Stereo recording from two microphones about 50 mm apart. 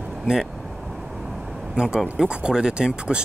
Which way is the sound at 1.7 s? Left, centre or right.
Centre.